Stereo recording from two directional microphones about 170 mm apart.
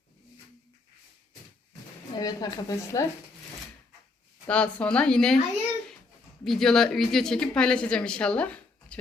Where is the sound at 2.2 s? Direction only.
25° left (ahead or behind).